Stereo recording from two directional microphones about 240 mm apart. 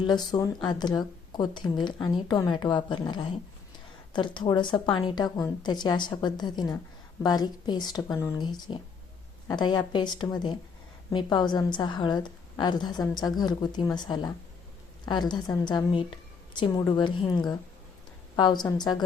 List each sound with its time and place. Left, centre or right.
0.1 s speech: centre